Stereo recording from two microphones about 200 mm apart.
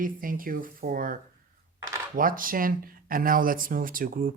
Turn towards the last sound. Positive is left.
turn(degrees=-45)  # may be behind; listen again after turning